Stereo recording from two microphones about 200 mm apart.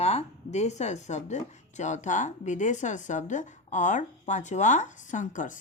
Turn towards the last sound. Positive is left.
turn(degrees=40)  # may be behind; listen again after turning